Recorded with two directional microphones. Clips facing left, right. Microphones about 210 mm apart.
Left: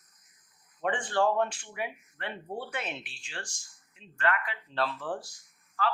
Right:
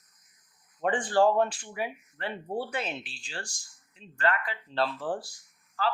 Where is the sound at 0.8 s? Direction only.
35° right (ahead or behind).